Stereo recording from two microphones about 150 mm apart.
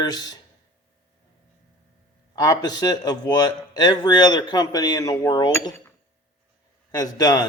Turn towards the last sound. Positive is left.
turn(degrees=25)  # may be behind; listen again after turning